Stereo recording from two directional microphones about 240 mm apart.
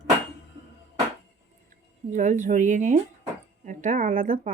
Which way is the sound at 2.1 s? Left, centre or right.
Right.